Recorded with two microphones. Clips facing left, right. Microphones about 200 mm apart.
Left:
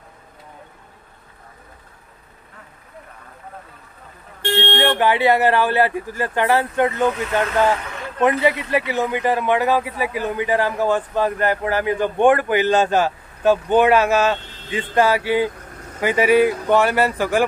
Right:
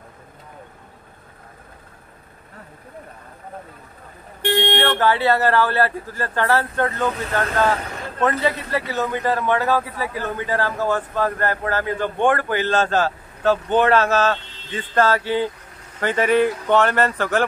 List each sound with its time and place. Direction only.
4.4 s vehicle: 15° right (ahead or behind)
4.7 s a man's voice: 15° left (ahead or behind)